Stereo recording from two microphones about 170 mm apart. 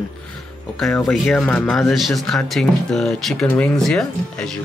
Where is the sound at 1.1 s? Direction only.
5° left (ahead or behind).